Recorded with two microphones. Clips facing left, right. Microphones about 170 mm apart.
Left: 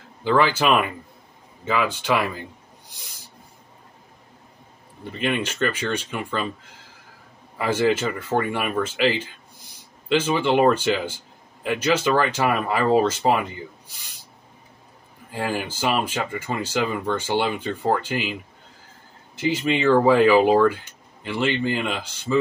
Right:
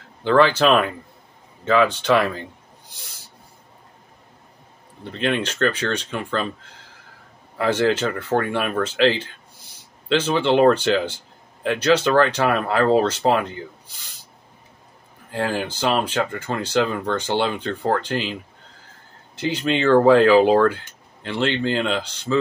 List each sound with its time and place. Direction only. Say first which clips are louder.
0.2 s speech: right 4 dB; 10° left (ahead or behind)
5.1 s speech: right 2 dB; 5° left (ahead or behind)
7.5 s speech: right 1 dB; 10° left (ahead or behind)
15.3 s speech: right 3 dB; 5° left (ahead or behind)
19.4 s speech: even; 5° left (ahead or behind)